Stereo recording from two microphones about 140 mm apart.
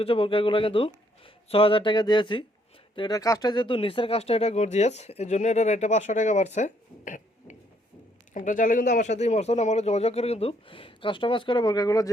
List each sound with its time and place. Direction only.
0.0 s speech: 40° left (ahead or behind); by 12.1 s 25° left (ahead or behind)